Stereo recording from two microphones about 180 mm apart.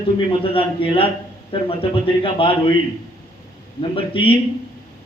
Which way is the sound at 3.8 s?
30° left (ahead or behind).